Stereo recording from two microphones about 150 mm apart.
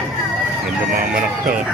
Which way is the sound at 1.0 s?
75° right (ahead or behind).